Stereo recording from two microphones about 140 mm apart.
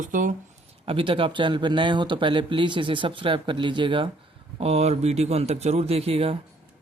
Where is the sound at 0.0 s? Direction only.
70° right (ahead or behind).